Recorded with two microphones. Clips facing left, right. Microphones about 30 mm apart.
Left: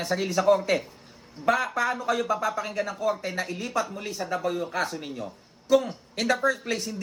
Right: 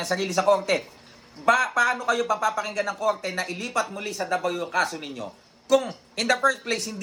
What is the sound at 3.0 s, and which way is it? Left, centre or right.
Speech, right.